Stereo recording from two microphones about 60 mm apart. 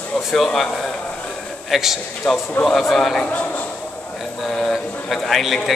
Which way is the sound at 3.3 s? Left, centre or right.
Left.